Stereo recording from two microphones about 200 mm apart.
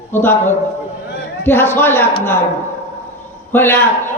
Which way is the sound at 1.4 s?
10° left (ahead or behind).